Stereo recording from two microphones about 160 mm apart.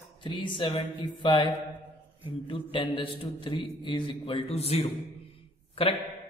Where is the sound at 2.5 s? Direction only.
35° left (ahead or behind).